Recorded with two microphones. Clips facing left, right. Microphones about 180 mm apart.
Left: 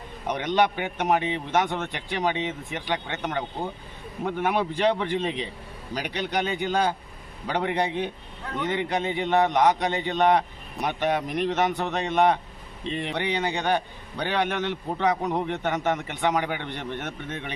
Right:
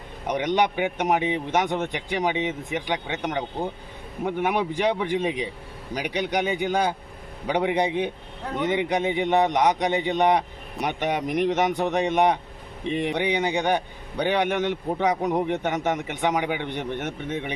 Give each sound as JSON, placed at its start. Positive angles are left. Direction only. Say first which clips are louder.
{"t": 0.3, "sound": "a man's voice", "louder": "right 1 dB", "side_deg": -15}